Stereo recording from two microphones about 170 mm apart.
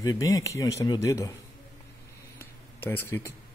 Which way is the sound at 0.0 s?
20° left (ahead or behind).